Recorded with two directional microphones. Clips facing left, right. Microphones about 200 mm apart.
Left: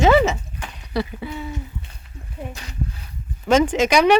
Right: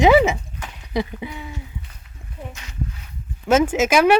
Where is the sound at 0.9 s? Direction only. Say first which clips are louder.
Even; 15° right (ahead or behind).